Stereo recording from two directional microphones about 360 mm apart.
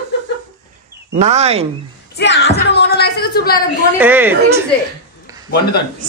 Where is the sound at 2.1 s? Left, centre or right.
Left.